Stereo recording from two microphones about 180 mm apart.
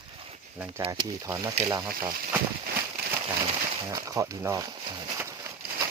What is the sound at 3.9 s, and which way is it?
Speech, 20° right (ahead or behind).